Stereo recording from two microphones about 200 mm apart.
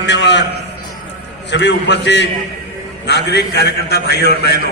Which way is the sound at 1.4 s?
60° left (ahead or behind).